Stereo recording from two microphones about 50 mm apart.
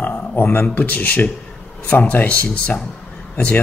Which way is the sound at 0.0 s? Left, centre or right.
Left.